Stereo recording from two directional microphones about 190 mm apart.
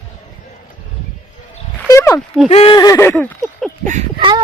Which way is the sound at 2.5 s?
30° left (ahead or behind).